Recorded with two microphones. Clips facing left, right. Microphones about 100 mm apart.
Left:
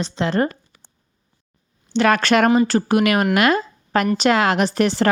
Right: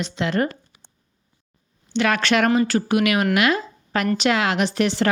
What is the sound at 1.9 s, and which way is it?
Speech, 40° left (ahead or behind).